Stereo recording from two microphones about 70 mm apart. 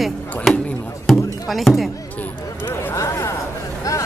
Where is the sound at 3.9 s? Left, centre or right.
Left.